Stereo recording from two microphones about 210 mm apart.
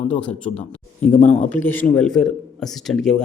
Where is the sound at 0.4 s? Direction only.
30° left (ahead or behind).